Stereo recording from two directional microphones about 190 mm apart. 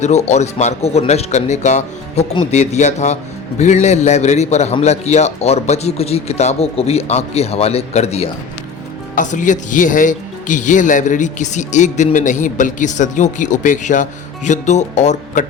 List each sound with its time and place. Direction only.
0.0 s speech: 35° left (ahead or behind)